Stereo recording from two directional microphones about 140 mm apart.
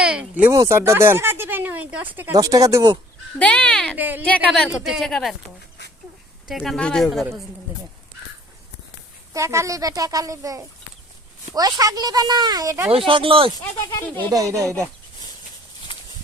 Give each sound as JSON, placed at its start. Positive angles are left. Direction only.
{"t": 0.0, "sound": "speech", "side_deg": -10}
{"t": 0.5, "sound": "speech", "side_deg": -20}
{"t": 2.3, "sound": "speech", "side_deg": -25}
{"t": 3.3, "sound": "speech", "side_deg": 10}
{"t": 3.9, "sound": "a woman's voice", "side_deg": -10}
{"t": 4.4, "sound": "speech", "side_deg": 5}
{"t": 6.5, "sound": "speech", "side_deg": 0}
{"t": 7.7, "sound": "a woman's voice", "side_deg": -15}
{"t": 9.3, "sound": "speech", "side_deg": -20}
{"t": 13.1, "sound": "speech", "side_deg": -40}
{"t": 14.3, "sound": "speech", "side_deg": -25}